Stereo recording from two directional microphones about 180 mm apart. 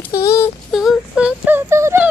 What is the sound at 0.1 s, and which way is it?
Child singing, 20° left (ahead or behind).